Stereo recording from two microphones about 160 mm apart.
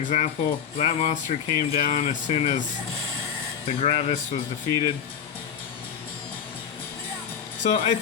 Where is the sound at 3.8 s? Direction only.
40° left (ahead or behind).